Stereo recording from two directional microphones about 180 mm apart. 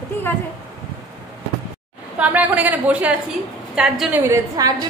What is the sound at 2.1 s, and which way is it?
A woman's voice, 10° right (ahead or behind).